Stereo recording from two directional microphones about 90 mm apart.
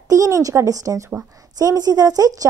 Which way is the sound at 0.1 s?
40° right (ahead or behind).